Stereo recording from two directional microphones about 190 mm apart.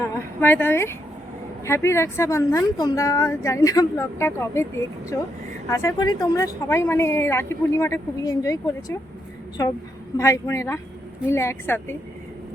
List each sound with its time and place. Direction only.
0.0 s a sound: 10° left (ahead or behind)
1.6 s a woman's voice: 15° left (ahead or behind)
10.2 s a woman's voice: 15° left (ahead or behind)